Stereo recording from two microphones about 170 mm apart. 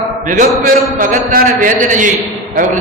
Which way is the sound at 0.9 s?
50° right (ahead or behind).